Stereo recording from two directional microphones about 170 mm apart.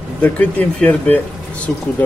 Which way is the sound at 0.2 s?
10° left (ahead or behind).